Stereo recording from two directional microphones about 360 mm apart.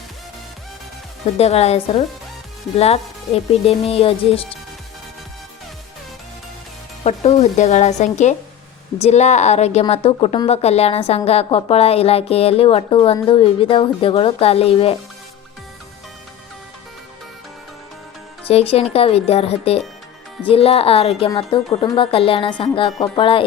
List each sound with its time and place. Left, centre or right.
1.4 s a woman's voice: centre
7.0 s a woman's voice: centre
18.4 s a woman's voice: centre